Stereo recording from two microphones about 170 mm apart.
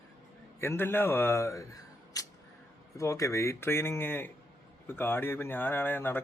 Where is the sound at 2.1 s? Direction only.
20° left (ahead or behind).